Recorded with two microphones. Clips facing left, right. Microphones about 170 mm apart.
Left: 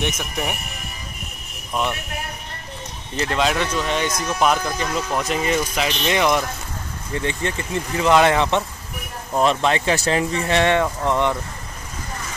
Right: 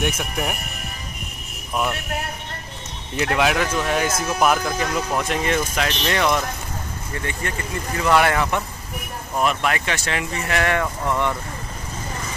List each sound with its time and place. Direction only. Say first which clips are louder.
0.0 s speech: right 1 dB; centre (ahead or behind)
1.7 s speech: even; 5° right (ahead or behind)
3.2 s speech: right 1 dB; 10° right (ahead or behind); by 6.4 s 10° left (ahead or behind)
7.2 s speech: left 3 dB; 25° left (ahead or behind)